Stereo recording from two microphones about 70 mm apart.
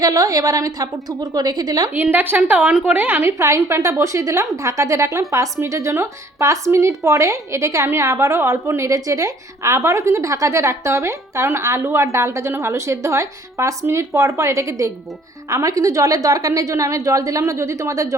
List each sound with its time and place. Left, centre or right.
0.0 s a woman's voice: right
1.9 s a woman's voice: right